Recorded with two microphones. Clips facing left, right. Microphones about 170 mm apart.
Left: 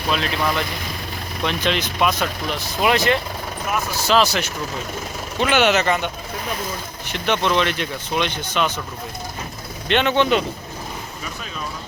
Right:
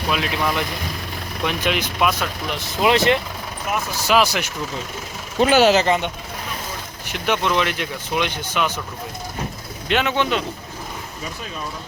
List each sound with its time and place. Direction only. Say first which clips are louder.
0.1 s speech: left 1 dB; 15° right (ahead or behind)
2.8 s speech: right 2 dB; 25° right (ahead or behind)
4.0 s speech: even; 10° right (ahead or behind)
5.4 s speech: right 3 dB; 35° right (ahead or behind)
7.1 s speech: left 1 dB; 10° right (ahead or behind)
9.9 s speech: left 3 dB; 5° right (ahead or behind)